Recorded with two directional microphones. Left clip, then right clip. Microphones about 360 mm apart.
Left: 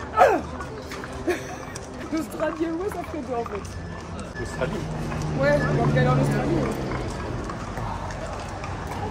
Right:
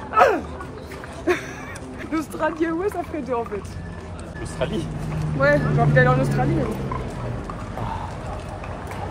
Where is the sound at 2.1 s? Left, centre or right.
Centre.